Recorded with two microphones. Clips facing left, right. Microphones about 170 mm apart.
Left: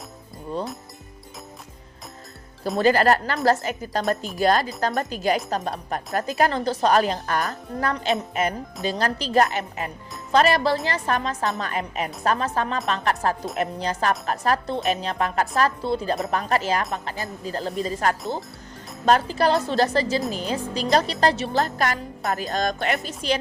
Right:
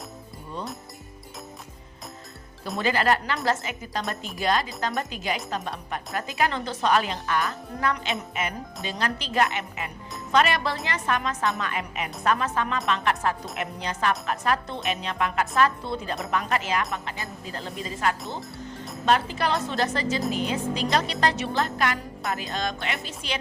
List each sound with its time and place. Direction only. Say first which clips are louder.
2.7 s speech: left 5 dB; 40° left (ahead or behind)